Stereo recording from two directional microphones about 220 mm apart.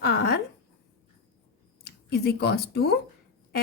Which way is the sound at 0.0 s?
45° left (ahead or behind).